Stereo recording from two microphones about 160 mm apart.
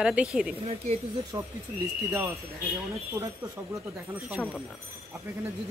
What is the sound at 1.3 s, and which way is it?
Speech, 25° right (ahead or behind).